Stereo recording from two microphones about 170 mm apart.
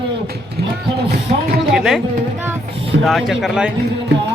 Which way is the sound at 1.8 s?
Centre (ahead or behind).